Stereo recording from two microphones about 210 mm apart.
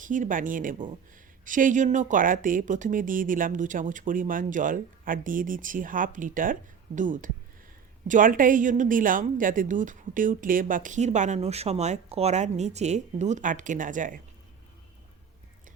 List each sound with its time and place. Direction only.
0.0 s a woman's voice: 40° right (ahead or behind)